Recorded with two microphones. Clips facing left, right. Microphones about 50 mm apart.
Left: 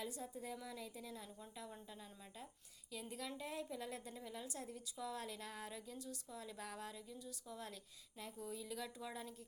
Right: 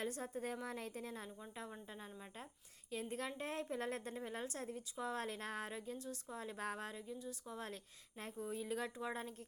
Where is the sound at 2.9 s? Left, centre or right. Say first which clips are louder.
Right 5 dB; right.